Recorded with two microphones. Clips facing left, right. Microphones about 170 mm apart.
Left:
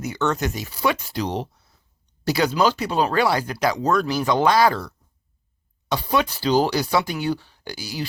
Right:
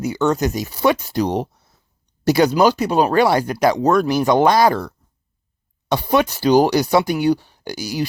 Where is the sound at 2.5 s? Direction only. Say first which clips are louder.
Right 5 dB; 40° right (ahead or behind).